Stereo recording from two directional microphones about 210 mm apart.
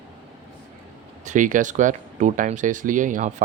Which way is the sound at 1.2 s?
35° right (ahead or behind).